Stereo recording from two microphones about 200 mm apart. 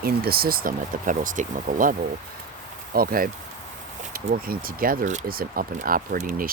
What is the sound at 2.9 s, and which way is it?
Speech, 45° right (ahead or behind).